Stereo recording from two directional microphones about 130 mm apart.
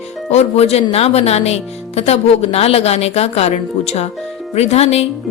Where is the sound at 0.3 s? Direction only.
55° left (ahead or behind).